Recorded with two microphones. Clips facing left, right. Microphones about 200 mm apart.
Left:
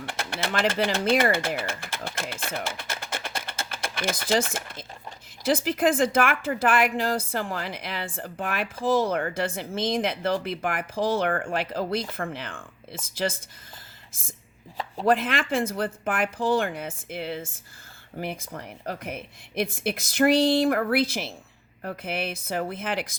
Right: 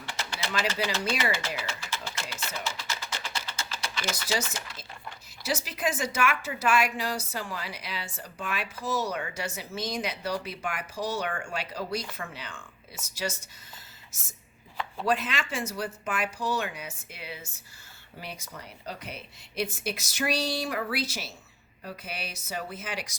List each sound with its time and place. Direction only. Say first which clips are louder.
0.0 s bird: left 5 dB; 55° left (ahead or behind)
5.4 s a woman's voice: left 8 dB; 55° left (ahead or behind)
14.1 s speech: left 7 dB; 90° left
15.0 s a woman's voice: left 6 dB; 55° left (ahead or behind)